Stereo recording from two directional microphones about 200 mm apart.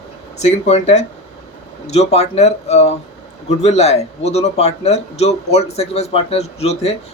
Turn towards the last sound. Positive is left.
turn(degrees=30)  # may be behind; listen again after turning